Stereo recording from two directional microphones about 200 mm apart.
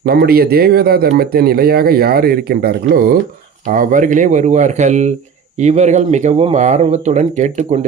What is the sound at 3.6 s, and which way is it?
Speech, 45° right (ahead or behind).